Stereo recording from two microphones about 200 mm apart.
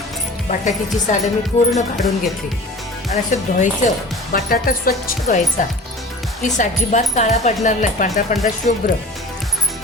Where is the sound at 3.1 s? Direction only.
40° left (ahead or behind).